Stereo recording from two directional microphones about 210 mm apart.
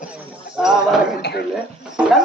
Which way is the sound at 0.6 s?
5° right (ahead or behind).